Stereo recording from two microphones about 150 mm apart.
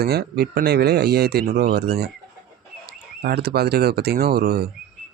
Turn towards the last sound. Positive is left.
turn(degrees=-90)